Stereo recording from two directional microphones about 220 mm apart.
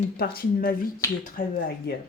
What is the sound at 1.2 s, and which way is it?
Speech, 40° left (ahead or behind).